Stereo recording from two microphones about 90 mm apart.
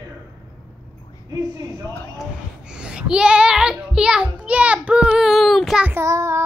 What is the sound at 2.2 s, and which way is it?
Child singing, 10° right (ahead or behind).